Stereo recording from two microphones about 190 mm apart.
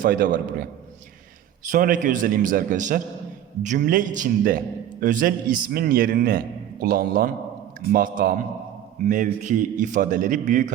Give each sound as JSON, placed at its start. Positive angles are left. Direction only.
{"t": 0.0, "sound": "a man's voice", "side_deg": -45}
{"t": 1.7, "sound": "a man's voice", "side_deg": -45}